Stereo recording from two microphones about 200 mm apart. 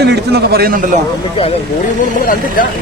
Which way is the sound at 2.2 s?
45° left (ahead or behind).